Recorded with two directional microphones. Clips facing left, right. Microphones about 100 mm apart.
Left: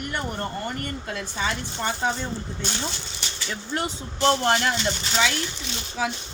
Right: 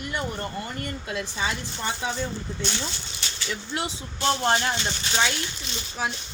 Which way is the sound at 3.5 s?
45° left (ahead or behind).